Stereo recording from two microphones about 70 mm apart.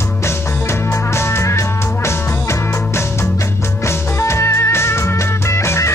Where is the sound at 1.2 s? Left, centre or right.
Left.